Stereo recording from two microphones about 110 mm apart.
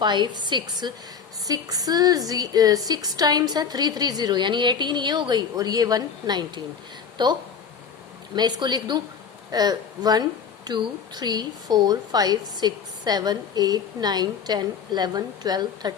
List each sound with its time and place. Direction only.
0.0 s a woman's voice: 45° right (ahead or behind)
8.4 s a woman's voice: 40° right (ahead or behind)